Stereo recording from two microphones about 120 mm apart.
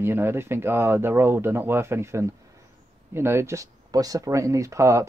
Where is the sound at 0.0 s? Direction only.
20° right (ahead or behind).